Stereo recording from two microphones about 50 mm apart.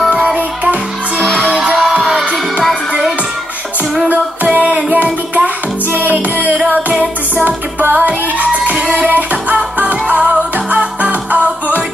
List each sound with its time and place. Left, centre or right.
1.5 s music: right
4.1 s music: right
7.9 s music: right